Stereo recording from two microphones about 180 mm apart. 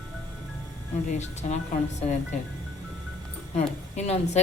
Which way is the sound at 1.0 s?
40° left (ahead or behind).